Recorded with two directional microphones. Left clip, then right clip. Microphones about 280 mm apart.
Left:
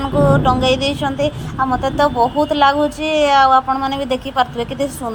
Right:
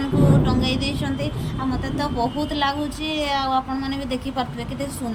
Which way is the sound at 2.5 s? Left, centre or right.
Centre.